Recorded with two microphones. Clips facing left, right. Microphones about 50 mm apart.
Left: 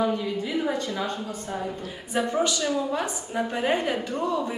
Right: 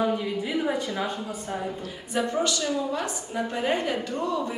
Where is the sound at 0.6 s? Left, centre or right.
Centre.